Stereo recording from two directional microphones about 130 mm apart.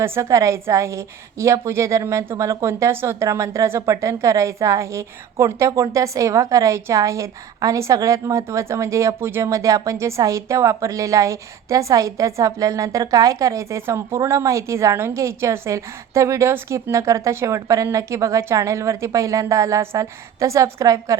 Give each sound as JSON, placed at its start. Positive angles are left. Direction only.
{"t": 0.0, "sound": "a woman's voice", "side_deg": -20}